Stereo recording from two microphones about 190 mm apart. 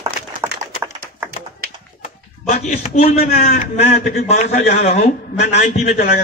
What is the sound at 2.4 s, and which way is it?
Speech, 35° left (ahead or behind).